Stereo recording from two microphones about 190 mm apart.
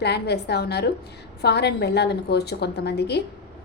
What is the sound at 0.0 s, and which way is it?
A woman's voice, 60° left (ahead or behind).